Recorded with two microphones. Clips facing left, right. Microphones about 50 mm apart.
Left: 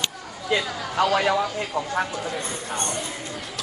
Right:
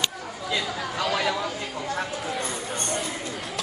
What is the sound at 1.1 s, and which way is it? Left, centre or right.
Speech, centre.